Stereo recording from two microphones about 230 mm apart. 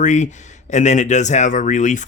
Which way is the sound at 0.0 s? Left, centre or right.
Left.